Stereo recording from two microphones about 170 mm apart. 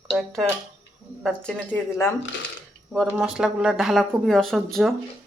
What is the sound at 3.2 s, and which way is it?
Speech, 5° right (ahead or behind).